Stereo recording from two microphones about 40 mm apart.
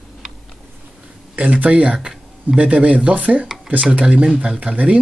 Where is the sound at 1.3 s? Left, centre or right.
Right.